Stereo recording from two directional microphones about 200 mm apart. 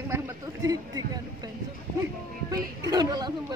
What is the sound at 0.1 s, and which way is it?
Speech, 15° right (ahead or behind).